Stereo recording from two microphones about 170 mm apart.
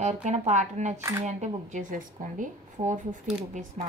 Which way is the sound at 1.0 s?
15° right (ahead or behind).